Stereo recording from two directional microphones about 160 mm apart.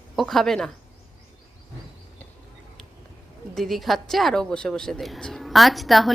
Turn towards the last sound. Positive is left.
turn(degrees=0)  # may be behind; listen again after turning